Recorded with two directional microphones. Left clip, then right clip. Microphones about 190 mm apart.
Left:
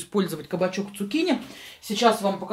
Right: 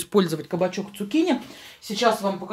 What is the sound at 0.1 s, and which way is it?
Speech, 35° right (ahead or behind).